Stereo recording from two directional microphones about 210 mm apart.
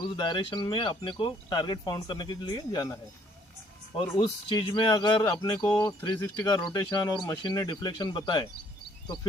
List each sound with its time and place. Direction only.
0.2 s speech: 20° left (ahead or behind)
4.2 s speech: 20° left (ahead or behind)